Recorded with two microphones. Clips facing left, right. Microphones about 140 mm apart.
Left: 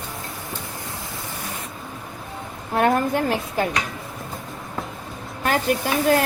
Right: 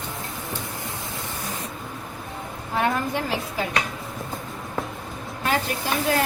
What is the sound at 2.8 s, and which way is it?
Speech, 50° left (ahead or behind).